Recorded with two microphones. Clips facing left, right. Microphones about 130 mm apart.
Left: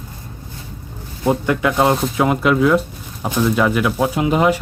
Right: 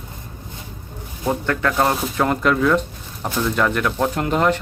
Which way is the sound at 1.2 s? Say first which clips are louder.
Left 4 dB; 15° left (ahead or behind).